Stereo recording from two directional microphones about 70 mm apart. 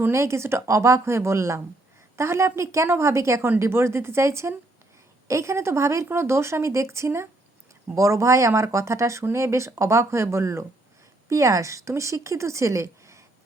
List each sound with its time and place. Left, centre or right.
0.1 s speech: right